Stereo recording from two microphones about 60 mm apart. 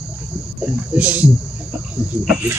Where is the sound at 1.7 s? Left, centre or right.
Right.